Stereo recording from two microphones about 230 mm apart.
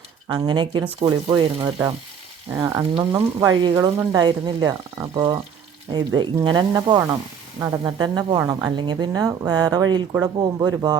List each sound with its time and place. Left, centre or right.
0.3 s speech: centre